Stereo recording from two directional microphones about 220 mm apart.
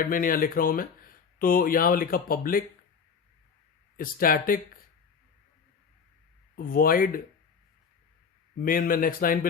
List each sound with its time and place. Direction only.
0.0 s speech: 40° left (ahead or behind)
3.9 s speech: 40° left (ahead or behind)
6.6 s speech: 40° left (ahead or behind)
8.5 s speech: 40° left (ahead or behind)